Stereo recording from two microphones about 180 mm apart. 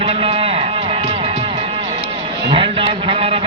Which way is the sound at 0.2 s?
30° right (ahead or behind).